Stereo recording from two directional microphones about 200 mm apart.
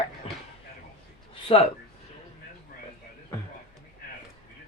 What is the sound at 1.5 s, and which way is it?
Speech, 25° left (ahead or behind).